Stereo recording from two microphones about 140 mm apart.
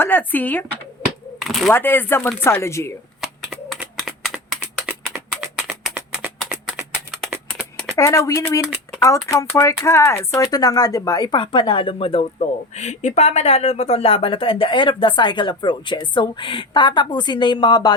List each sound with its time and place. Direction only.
0.0 s speech: 15° left (ahead or behind)
1.4 s a sound: centre (ahead or behind)
1.7 s speech: 15° left (ahead or behind)
3.9 s typing: 5° right (ahead or behind)
6.7 s a sound: centre (ahead or behind)
7.9 s speech: 20° left (ahead or behind); by 12.3 s 40° left (ahead or behind)
12.4 s speech: 55° left (ahead or behind); by 17.9 s 30° left (ahead or behind)